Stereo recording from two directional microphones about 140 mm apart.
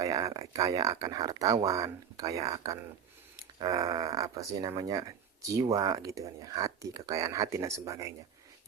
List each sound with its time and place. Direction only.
0.0 s speech: 25° right (ahead or behind)